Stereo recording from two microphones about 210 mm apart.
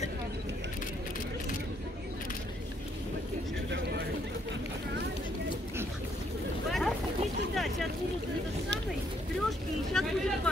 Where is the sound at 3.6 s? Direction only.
55° right (ahead or behind).